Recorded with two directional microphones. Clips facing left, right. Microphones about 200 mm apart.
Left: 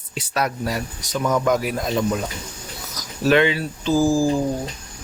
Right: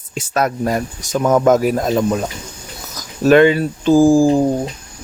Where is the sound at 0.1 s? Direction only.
45° right (ahead or behind).